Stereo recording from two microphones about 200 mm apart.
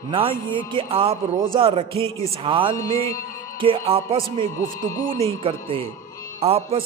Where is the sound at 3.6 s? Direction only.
25° right (ahead or behind).